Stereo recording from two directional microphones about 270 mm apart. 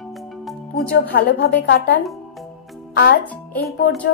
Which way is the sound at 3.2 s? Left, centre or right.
Centre.